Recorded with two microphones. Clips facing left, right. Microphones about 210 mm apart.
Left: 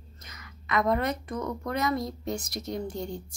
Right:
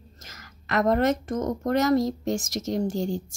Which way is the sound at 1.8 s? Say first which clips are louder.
Right 6 dB; 90° right.